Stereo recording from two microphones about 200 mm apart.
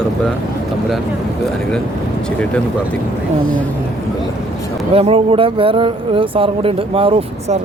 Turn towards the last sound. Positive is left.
turn(degrees=-30)  # may be behind; listen again after turning